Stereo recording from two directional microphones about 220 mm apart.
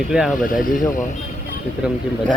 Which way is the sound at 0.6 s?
35° left (ahead or behind).